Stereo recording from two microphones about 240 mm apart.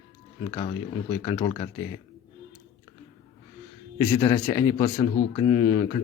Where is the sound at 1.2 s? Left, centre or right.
Left.